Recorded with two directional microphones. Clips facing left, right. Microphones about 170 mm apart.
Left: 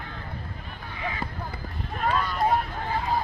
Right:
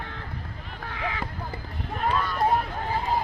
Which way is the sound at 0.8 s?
90° right.